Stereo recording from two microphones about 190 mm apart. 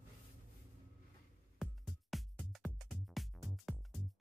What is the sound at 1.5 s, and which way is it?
Music, centre (ahead or behind).